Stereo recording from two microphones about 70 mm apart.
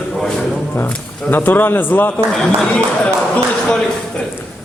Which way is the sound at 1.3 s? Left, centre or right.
Left.